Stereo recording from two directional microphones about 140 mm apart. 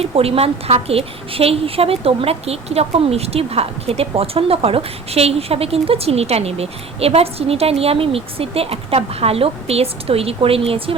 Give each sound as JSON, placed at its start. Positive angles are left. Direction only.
{"t": 0.0, "sound": "a woman's voice", "side_deg": -45}